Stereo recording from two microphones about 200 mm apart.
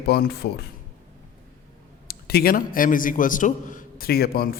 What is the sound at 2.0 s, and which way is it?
A man's voice, 50° left (ahead or behind).